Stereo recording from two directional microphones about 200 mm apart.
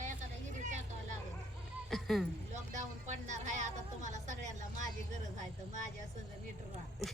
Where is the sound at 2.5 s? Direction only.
35° right (ahead or behind).